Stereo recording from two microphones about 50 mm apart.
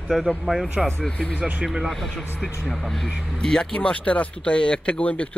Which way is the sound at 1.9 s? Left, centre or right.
Centre.